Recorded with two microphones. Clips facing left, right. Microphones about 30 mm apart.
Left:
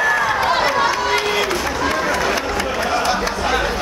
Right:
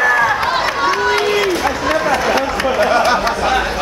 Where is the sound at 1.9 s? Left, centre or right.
Centre.